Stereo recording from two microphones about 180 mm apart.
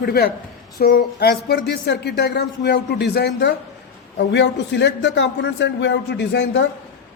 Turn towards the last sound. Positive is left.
turn(degrees=70)  # may be behind; listen again after turning